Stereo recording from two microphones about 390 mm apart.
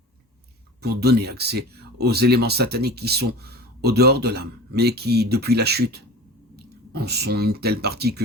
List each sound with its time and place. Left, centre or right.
0.8 s speech: right